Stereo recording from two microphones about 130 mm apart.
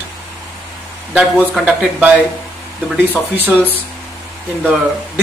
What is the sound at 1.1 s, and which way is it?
Speech, 10° right (ahead or behind).